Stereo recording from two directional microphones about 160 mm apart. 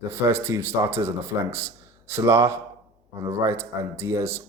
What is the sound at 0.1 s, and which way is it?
Speech, 15° right (ahead or behind).